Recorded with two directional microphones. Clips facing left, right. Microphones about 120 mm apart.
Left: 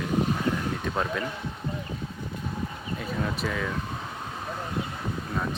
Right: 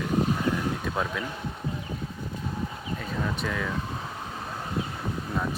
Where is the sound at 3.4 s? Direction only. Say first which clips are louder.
Left 1 dB; 5° left (ahead or behind).